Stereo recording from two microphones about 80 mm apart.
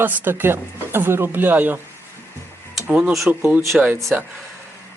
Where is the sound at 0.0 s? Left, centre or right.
Right.